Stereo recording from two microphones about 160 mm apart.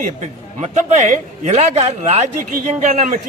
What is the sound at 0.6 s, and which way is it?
Speech, 45° right (ahead or behind).